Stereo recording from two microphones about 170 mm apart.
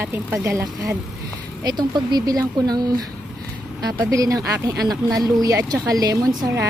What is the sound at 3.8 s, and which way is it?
A woman's voice, 20° right (ahead or behind).